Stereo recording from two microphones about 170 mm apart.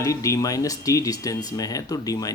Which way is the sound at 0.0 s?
20° left (ahead or behind).